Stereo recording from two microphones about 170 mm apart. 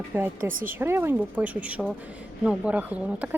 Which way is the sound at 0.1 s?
15° right (ahead or behind).